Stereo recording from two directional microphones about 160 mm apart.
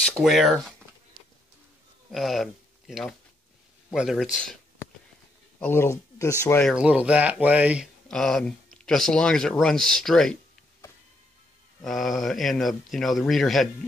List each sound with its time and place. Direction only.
0.0 s speech: 5° left (ahead or behind)
2.1 s speech: centre (ahead or behind)
5.6 s speech: 15° left (ahead or behind)
6.6 s speech: 5° right (ahead or behind)
8.1 s speech: 5° left (ahead or behind)
11.8 s speech: centre (ahead or behind)